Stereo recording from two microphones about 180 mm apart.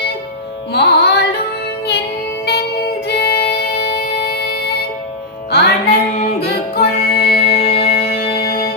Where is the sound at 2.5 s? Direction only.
65° left (ahead or behind).